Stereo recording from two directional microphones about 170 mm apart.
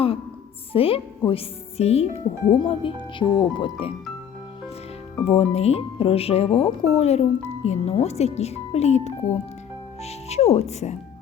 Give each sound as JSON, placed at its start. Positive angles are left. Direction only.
{"t": 0.7, "sound": "speech", "side_deg": 35}
{"t": 5.2, "sound": "speech", "side_deg": 35}